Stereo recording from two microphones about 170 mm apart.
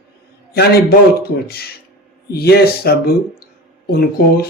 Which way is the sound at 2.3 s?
65° left (ahead or behind).